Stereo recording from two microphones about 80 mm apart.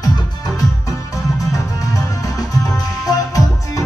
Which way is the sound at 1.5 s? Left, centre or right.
Left.